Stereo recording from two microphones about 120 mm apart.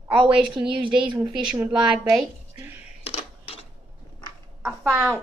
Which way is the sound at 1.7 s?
40° right (ahead or behind).